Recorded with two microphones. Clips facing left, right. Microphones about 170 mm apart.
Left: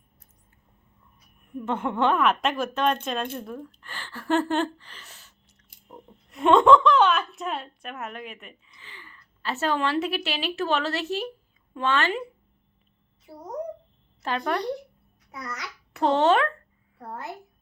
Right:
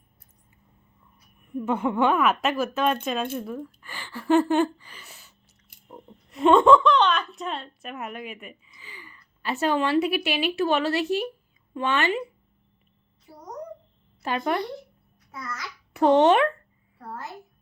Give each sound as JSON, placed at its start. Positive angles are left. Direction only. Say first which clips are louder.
{"t": 1.5, "sound": "a woman's voice", "louder": "right 3 dB", "side_deg": -10}
{"t": 14.2, "sound": "speech", "louder": "right 1 dB", "side_deg": -10}
{"t": 16.0, "sound": "speech", "louder": "right 3 dB", "side_deg": -15}